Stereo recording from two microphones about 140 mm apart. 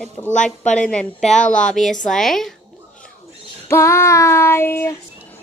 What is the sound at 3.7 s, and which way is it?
Child singing, 20° left (ahead or behind).